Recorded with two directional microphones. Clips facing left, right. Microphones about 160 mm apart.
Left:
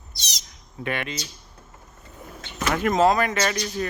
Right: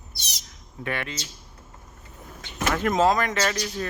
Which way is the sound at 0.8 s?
20° left (ahead or behind).